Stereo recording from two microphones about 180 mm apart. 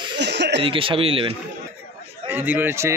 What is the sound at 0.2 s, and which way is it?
Chuckle, 75° right (ahead or behind).